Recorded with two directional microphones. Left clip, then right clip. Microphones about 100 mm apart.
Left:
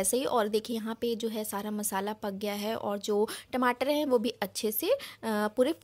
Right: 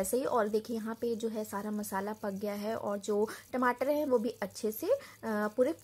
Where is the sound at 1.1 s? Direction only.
10° left (ahead or behind).